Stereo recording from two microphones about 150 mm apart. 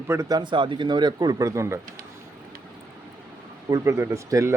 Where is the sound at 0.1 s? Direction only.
20° right (ahead or behind).